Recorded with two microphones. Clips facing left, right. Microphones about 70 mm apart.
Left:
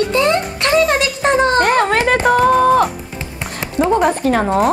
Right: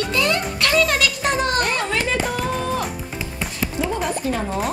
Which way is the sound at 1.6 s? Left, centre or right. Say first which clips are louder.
Left 9 dB; left.